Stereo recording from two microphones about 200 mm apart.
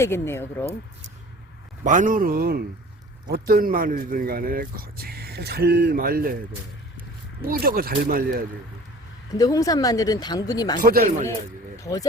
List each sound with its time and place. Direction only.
0.0 s speech: 10° left (ahead or behind)
1.8 s speech: 40° right (ahead or behind)
7.4 s speech: 50° right (ahead or behind)
9.4 s speech: 15° left (ahead or behind)
10.8 s speech: 45° right (ahead or behind)
11.8 s speech: 20° left (ahead or behind)